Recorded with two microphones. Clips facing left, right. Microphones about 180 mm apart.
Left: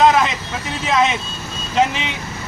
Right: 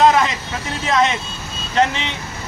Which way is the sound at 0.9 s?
Centre (ahead or behind).